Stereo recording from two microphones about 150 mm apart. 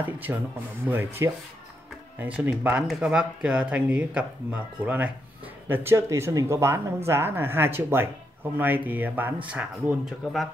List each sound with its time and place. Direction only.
0.0 s speech: 10° right (ahead or behind)